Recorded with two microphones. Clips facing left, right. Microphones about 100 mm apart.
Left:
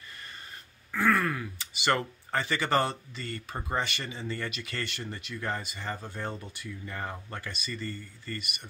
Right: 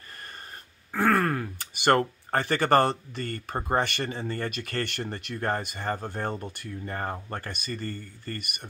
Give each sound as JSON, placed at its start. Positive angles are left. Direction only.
{"t": 0.9, "sound": "speech", "side_deg": -50}